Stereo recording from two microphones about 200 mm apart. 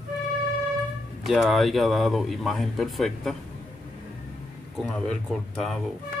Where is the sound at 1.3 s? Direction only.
Centre (ahead or behind).